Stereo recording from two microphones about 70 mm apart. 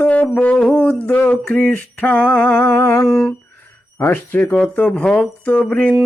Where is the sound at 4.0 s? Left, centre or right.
Left.